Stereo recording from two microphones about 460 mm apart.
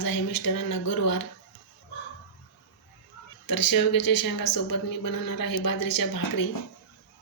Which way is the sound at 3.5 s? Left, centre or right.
Left.